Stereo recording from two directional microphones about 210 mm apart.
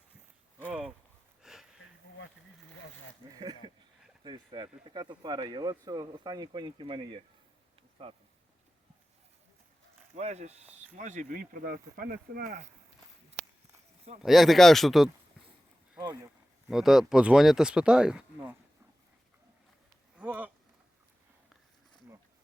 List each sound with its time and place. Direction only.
0.7 s a sound: 5° right (ahead or behind)
3.3 s speech: 20° right (ahead or behind)
10.2 s speech: 30° right (ahead or behind)
14.2 s speech: centre (ahead or behind)
16.6 s speech: centre (ahead or behind)
20.1 s speech: 5° right (ahead or behind)